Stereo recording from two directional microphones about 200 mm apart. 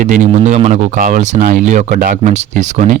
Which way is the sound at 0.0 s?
40° right (ahead or behind).